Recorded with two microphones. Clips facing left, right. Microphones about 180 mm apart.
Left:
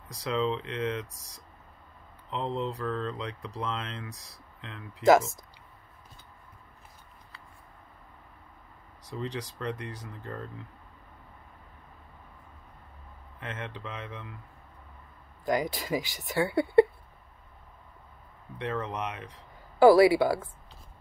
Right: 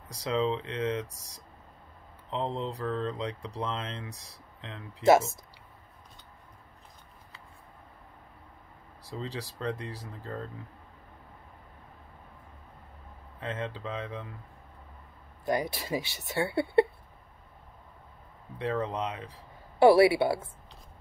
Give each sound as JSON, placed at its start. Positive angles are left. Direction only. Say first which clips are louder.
{"t": 0.2, "sound": "speech", "louder": "right 1 dB", "side_deg": -30}
{"t": 2.3, "sound": "speech", "louder": "left 1 dB", "side_deg": -35}
{"t": 9.0, "sound": "speech", "louder": "left 2 dB", "side_deg": -30}
{"t": 13.4, "sound": "speech", "louder": "right 4 dB", "side_deg": -30}
{"t": 15.4, "sound": "speech", "louder": "left 1 dB", "side_deg": -30}
{"t": 18.7, "sound": "speech", "louder": "right 2 dB", "side_deg": -20}